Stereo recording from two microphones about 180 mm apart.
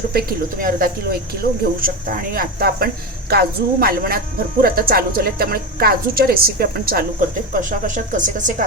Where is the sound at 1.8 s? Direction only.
50° right (ahead or behind).